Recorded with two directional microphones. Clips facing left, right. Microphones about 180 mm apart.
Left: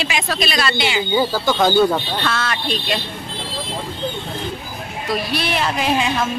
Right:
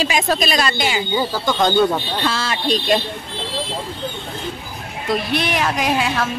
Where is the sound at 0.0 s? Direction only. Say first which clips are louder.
Right 3 dB; 40° right (ahead or behind).